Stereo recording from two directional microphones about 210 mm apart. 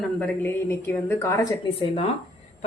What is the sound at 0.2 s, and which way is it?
Speech, 10° left (ahead or behind).